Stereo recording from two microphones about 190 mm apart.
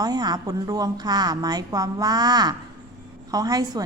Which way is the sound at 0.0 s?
20° right (ahead or behind).